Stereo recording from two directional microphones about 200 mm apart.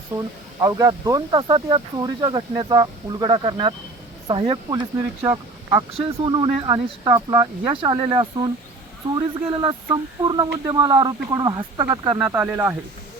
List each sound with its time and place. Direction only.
0.2 s speech: 15° right (ahead or behind)
5.2 s speech: 15° right (ahead or behind)
6.0 s speech: 25° right (ahead or behind)